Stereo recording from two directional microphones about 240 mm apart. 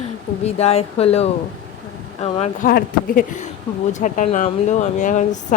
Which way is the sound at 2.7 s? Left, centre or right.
Left.